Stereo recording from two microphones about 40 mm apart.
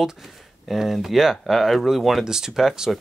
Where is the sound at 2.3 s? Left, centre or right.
Centre.